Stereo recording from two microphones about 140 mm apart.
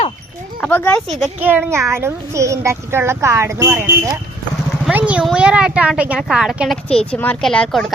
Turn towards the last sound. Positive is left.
turn(degrees=0)  # may be behind; listen again after turning